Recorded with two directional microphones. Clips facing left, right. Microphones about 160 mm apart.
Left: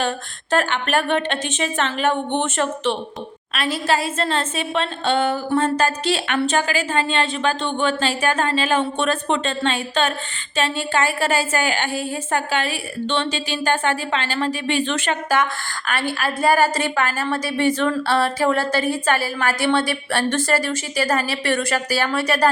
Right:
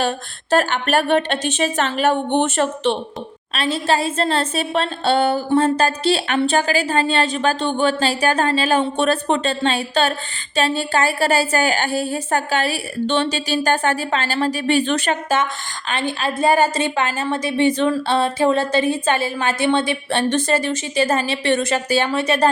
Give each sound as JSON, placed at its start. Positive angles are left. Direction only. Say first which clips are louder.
{"t": 0.5, "sound": "a woman's voice", "louder": "right 3 dB", "side_deg": -40}
{"t": 15.9, "sound": "a woman's voice", "louder": "right 1 dB", "side_deg": -20}